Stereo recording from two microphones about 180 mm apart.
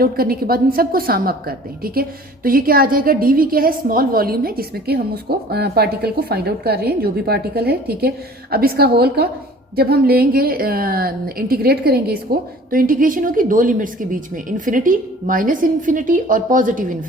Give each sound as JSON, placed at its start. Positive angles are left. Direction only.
{"t": 0.0, "sound": "a woman's voice", "side_deg": -55}